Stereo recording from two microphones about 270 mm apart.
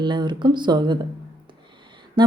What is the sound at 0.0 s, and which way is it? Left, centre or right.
Speech, centre.